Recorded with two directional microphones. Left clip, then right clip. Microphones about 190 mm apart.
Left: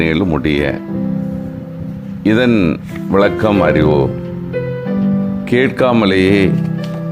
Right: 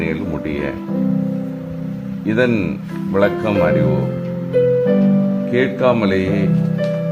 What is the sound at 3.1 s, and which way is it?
Speech, 40° left (ahead or behind).